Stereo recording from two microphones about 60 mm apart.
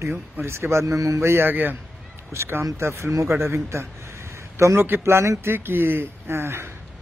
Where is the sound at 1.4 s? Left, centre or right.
Right.